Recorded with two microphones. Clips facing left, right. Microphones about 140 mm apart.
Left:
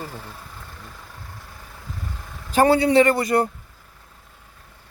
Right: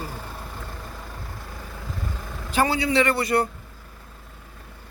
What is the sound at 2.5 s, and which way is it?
Speech, 45° left (ahead or behind).